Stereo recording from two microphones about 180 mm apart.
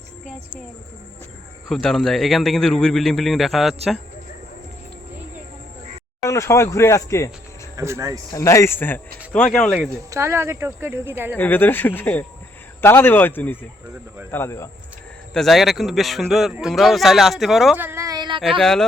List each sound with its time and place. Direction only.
1.6 s speech: centre (ahead or behind)
6.2 s speech: 15° left (ahead or behind)
7.8 s speech: 15° right (ahead or behind)
8.3 s speech: 15° left (ahead or behind)
10.1 s speech: 15° right (ahead or behind)
11.3 s speech: 10° left (ahead or behind)
15.3 s speech: centre (ahead or behind)
17.8 s a sound: 15° right (ahead or behind)
18.6 s speech: centre (ahead or behind)